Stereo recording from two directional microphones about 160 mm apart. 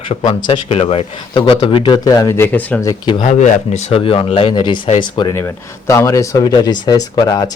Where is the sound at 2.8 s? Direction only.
25° left (ahead or behind).